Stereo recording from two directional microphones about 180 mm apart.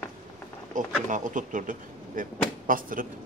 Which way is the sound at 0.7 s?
45° right (ahead or behind).